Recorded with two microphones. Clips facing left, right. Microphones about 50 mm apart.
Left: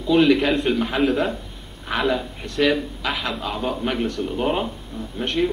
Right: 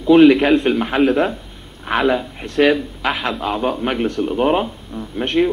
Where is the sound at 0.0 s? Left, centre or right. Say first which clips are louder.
Right 7 dB; right.